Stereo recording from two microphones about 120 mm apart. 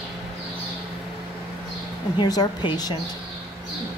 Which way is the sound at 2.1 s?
35° left (ahead or behind).